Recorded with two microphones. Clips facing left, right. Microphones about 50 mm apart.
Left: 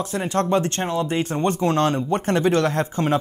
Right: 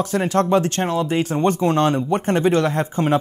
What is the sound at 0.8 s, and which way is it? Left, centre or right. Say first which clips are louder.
Speech: right 3 dB; right.